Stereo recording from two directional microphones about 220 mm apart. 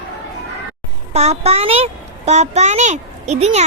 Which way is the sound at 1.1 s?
30° right (ahead or behind).